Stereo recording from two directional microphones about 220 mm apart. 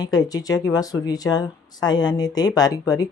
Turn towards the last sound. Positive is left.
turn(degrees=15)  # may be behind; listen again after turning